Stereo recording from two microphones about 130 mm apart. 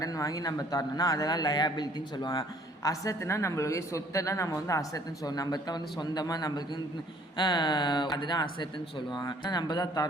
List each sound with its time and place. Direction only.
0.0 s a man's voice: 25° left (ahead or behind)